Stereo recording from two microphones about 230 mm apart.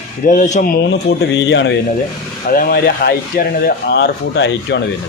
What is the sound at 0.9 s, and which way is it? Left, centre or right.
Speech, left.